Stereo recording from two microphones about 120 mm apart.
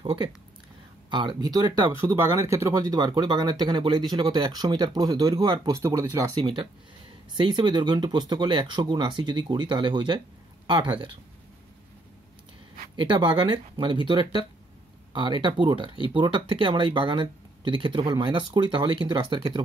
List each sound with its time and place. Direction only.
0.0 s speech: 40° right (ahead or behind)
7.3 s speech: 40° right (ahead or behind)
12.9 s speech: 40° right (ahead or behind)